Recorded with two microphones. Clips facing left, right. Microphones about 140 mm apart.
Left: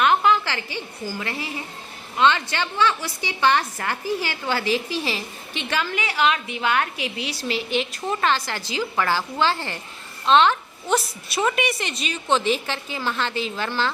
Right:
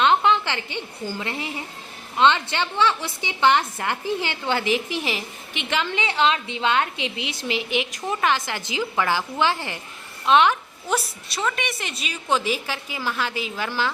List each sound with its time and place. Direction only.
0.0 s a woman's voice: 25° right (ahead or behind)
11.3 s a woman's voice: 10° left (ahead or behind)
11.6 s a woman's voice: centre (ahead or behind)